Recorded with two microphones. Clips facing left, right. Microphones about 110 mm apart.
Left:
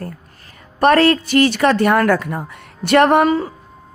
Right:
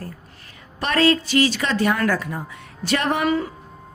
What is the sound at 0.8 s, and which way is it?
A woman's voice, 55° left (ahead or behind).